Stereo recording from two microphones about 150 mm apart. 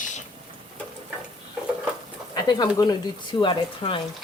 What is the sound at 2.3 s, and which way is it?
Speech, 30° left (ahead or behind).